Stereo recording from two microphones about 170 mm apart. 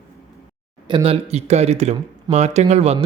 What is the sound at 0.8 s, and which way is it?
Speech, 30° right (ahead or behind).